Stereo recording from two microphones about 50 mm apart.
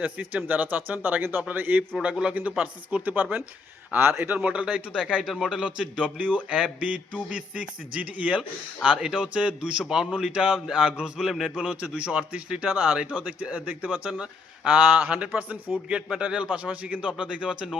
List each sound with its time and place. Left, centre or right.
0.0 s speech: right
2.0 s speech: right
2.3 s speech: right
3.9 s speech: right
4.4 s speech: right
5.3 s a man's voice: centre
5.6 s speech: right
11.3 s a man's voice: centre
11.5 s speech: right
15.9 s speech: centre